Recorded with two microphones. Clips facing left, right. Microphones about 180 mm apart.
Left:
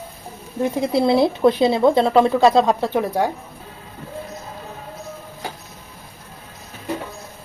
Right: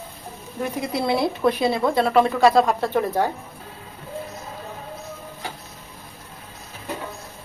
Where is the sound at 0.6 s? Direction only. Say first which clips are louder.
Left 6 dB; 25° left (ahead or behind).